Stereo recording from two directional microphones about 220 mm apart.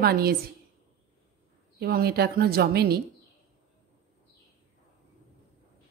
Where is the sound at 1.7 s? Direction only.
45° right (ahead or behind).